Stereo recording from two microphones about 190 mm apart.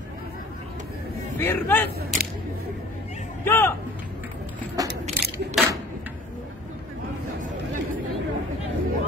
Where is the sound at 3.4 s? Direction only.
10° left (ahead or behind).